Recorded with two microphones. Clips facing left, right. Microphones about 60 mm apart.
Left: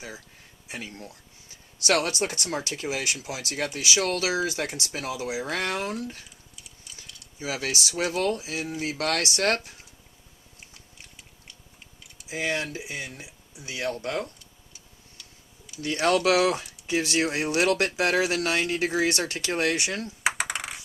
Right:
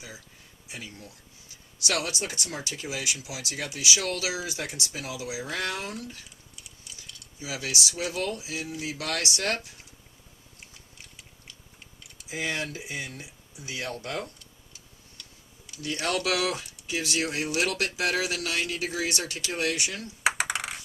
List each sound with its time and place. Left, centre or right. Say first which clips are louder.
0.7 s speech: left 4 dB; left
7.3 s speech: left 3 dB; left
10.9 s a sound: even; centre
12.3 s speech: left 3 dB; left
15.2 s tick-tock: even; centre
15.8 s speech: left 6 dB; left
20.2 s typing: right 2 dB; centre